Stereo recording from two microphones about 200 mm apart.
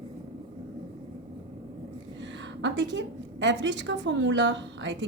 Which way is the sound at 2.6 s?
65° right (ahead or behind).